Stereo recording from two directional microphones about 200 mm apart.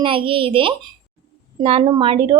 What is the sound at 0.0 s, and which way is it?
A woman's voice, 25° right (ahead or behind).